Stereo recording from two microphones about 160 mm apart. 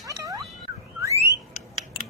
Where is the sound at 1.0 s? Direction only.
20° right (ahead or behind).